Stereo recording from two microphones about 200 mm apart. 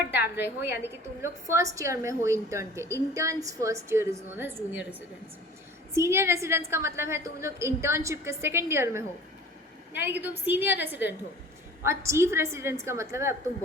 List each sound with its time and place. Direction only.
0.1 s a woman's voice: 10° right (ahead or behind)